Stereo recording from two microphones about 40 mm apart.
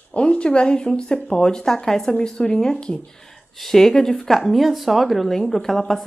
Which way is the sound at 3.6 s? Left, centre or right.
Centre.